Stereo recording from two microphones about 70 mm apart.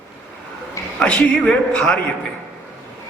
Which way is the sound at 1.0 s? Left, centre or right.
Centre.